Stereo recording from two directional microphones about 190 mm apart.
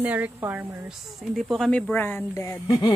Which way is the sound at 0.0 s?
10° right (ahead or behind).